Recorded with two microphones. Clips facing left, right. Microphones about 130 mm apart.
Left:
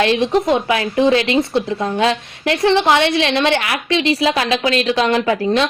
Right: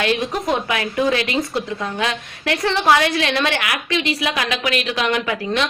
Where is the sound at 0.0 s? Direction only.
30° left (ahead or behind).